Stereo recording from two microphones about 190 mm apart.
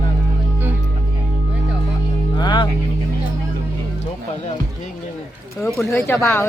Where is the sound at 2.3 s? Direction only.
25° left (ahead or behind).